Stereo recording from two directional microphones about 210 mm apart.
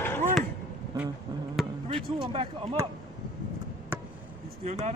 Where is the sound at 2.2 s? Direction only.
25° right (ahead or behind).